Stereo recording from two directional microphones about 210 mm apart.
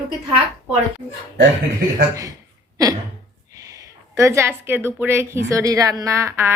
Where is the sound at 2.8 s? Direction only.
15° right (ahead or behind).